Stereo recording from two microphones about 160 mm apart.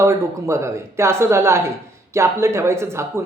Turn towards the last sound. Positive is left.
turn(degrees=-15)  # may be behind; listen again after turning